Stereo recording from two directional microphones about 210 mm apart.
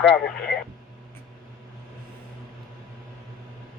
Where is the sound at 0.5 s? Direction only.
55° left (ahead or behind).